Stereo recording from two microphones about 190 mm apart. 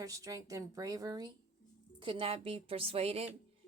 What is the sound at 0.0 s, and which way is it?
A woman's voice, 15° right (ahead or behind).